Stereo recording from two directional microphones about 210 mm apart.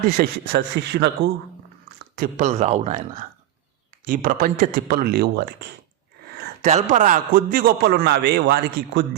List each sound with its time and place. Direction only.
0.2 s a man's voice: 45° right (ahead or behind)
6.7 s a man's voice: 35° right (ahead or behind)